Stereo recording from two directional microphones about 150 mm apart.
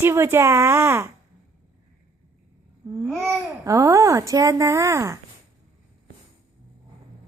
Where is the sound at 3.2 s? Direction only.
20° right (ahead or behind).